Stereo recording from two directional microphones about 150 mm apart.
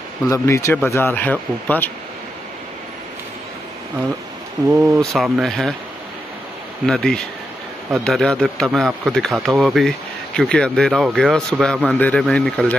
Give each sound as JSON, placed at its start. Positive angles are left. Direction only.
{"t": 0.3, "sound": "speech", "side_deg": 20}
{"t": 4.6, "sound": "speech", "side_deg": -10}
{"t": 6.9, "sound": "speech", "side_deg": 5}